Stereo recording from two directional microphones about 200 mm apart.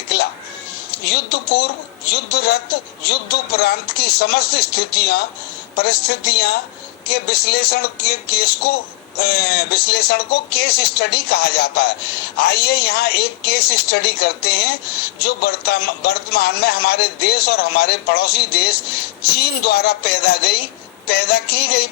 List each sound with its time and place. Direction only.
0.1 s a man's voice: 50° left (ahead or behind)